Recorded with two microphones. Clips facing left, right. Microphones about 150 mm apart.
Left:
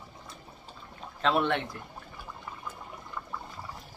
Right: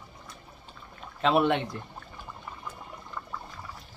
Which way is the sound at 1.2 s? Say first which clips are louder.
Right 3 dB; 5° right (ahead or behind).